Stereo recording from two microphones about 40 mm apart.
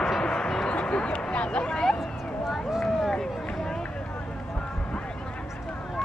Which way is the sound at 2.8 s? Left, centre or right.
Centre.